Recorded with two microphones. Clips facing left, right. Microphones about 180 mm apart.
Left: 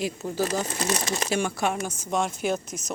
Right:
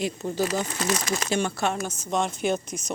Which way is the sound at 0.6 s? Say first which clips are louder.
Even; 30° left (ahead or behind).